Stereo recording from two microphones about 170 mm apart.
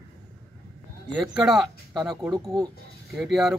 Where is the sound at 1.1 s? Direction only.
Centre (ahead or behind).